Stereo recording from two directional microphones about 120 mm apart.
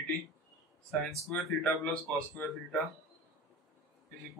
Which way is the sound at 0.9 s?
Centre (ahead or behind).